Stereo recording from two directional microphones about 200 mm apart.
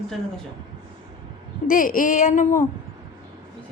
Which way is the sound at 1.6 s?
45° left (ahead or behind).